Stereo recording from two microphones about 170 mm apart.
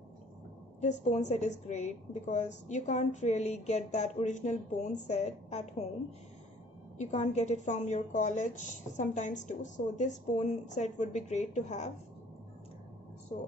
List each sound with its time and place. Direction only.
0.7 s a woman's voice: 45° left (ahead or behind)
7.0 s a woman's voice: 40° left (ahead or behind)